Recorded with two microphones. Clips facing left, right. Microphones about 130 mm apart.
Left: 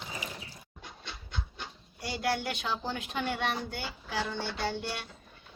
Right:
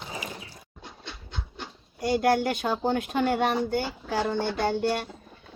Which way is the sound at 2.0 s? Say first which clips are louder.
Right 9 dB; 50° right (ahead or behind).